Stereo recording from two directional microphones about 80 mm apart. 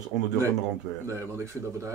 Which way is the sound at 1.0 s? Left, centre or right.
Right.